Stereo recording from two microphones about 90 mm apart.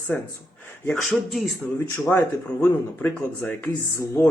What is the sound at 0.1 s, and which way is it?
Speech, 15° left (ahead or behind).